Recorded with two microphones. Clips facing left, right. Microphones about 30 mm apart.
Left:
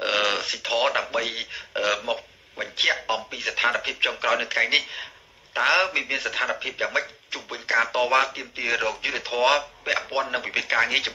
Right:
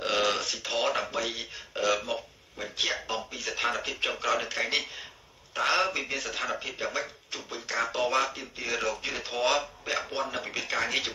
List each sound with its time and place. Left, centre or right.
0.0 s speech: left